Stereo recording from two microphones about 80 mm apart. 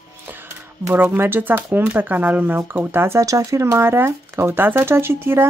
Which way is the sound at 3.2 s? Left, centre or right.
Right.